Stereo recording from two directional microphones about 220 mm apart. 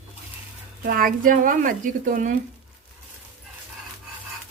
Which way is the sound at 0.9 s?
40° right (ahead or behind).